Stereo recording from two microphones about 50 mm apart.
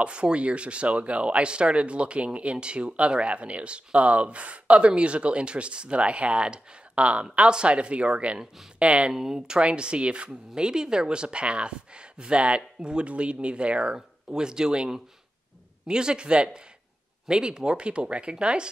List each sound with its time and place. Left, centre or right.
0.0 s speech: right
9.1 s speech: centre